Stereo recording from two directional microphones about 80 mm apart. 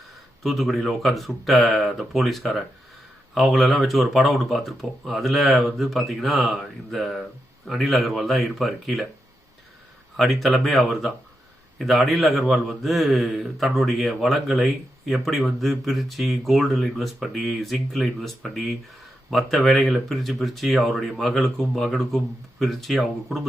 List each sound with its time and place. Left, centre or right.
0.4 s a man's voice: centre
10.2 s a man's voice: centre